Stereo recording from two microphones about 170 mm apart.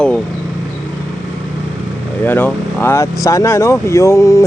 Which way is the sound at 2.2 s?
10° left (ahead or behind).